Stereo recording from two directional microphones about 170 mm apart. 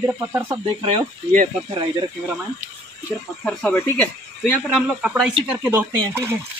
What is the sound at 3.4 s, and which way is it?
Speech, 10° left (ahead or behind).